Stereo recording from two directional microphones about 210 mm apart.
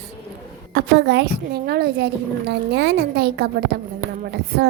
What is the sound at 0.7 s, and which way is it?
A woman's voice, 50° right (ahead or behind).